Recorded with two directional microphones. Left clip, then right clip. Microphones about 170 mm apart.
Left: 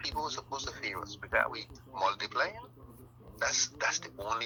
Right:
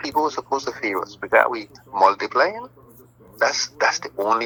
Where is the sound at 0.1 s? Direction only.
35° right (ahead or behind).